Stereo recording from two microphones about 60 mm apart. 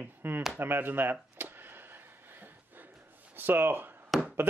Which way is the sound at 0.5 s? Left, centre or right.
Right.